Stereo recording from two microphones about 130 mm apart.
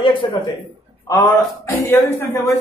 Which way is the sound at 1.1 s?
25° left (ahead or behind).